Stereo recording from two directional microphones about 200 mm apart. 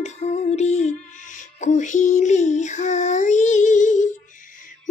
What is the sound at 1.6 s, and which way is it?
Child singing, 40° left (ahead or behind).